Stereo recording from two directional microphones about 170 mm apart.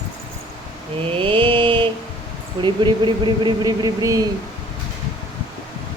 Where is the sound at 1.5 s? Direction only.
30° right (ahead or behind).